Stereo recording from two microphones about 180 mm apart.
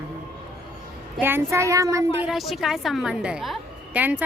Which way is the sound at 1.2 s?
15° right (ahead or behind).